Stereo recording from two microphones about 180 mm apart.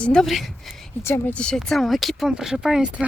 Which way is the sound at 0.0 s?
5° left (ahead or behind).